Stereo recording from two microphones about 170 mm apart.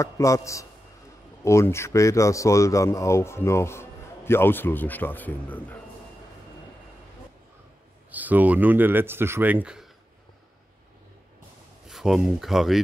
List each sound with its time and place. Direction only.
0.0 s a man's voice: 20° left (ahead or behind)
8.1 s speech: 10° right (ahead or behind)
11.9 s speech: centre (ahead or behind)